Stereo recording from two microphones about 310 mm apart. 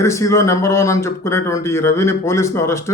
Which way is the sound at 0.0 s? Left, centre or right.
Centre.